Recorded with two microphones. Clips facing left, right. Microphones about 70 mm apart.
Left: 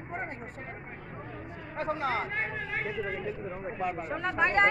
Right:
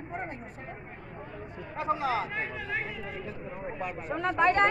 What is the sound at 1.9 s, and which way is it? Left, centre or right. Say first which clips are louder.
Speech: right 1 dB; left.